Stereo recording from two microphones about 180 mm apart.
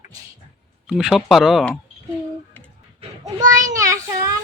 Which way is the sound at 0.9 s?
5° right (ahead or behind).